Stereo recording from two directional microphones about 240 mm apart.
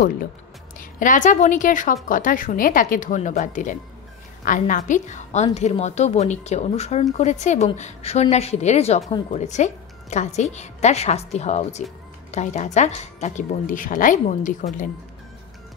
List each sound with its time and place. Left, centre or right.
0.7 s a woman's voice: left